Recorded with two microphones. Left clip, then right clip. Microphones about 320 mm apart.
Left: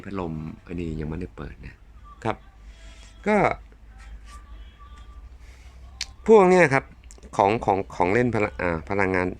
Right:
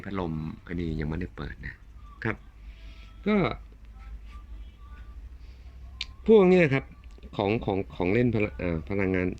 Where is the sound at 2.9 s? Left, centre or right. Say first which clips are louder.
Left 6 dB; centre.